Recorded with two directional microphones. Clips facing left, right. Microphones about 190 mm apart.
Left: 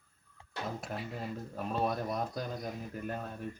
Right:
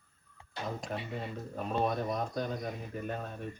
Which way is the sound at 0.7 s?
Centre (ahead or behind).